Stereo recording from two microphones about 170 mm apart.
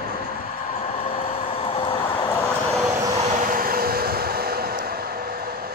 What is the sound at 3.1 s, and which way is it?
Vehicle, 45° right (ahead or behind).